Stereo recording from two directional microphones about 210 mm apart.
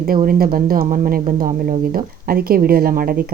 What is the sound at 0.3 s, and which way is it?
Speech, 45° right (ahead or behind).